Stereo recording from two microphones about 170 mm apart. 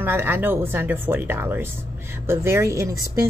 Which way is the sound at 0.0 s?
15° right (ahead or behind).